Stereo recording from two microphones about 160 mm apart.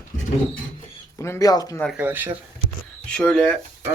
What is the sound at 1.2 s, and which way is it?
Speech, 20° left (ahead or behind).